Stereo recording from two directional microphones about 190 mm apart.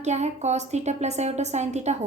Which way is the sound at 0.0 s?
35° right (ahead or behind).